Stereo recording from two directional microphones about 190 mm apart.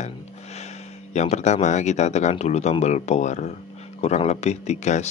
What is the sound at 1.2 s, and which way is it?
Speech, 35° left (ahead or behind).